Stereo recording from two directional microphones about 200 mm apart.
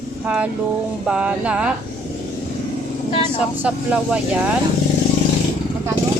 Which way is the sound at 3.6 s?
5° right (ahead or behind).